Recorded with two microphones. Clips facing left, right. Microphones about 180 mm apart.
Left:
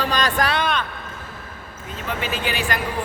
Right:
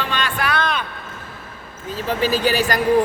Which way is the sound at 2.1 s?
35° right (ahead or behind).